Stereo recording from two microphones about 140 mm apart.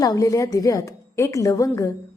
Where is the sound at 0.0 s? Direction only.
25° left (ahead or behind).